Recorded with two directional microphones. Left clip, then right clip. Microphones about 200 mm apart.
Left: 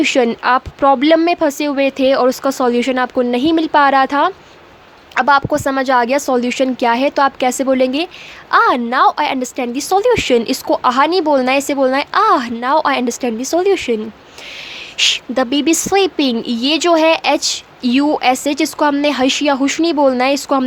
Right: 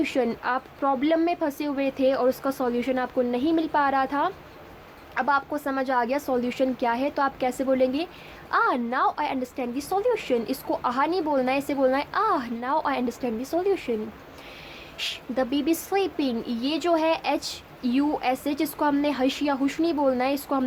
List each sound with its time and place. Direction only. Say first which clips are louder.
0.0 s a woman's voice: left 12 dB; 30° left (ahead or behind)
14.9 s a woman's voice: left 13 dB; 30° left (ahead or behind)